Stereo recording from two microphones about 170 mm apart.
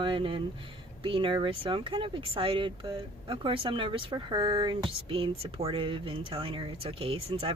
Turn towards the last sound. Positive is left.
turn(degrees=-30)  # may be behind; listen again after turning